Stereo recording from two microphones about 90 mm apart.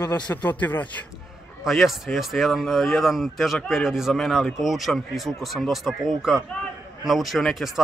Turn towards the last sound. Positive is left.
turn(degrees=0)  # may be behind; listen again after turning